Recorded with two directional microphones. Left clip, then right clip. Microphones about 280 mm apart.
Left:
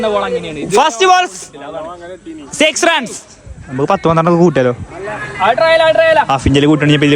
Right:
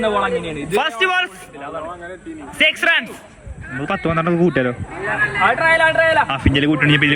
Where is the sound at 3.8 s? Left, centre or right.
Right.